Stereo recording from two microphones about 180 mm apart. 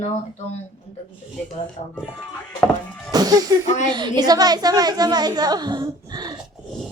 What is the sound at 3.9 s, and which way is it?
A woman's voice, 25° right (ahead or behind).